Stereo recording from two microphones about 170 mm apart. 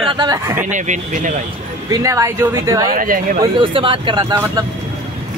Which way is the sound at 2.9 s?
55° right (ahead or behind).